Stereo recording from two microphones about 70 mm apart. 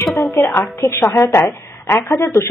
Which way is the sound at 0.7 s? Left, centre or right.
Left.